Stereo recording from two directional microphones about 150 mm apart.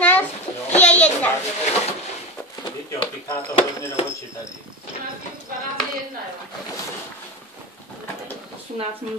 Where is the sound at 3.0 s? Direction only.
35° left (ahead or behind).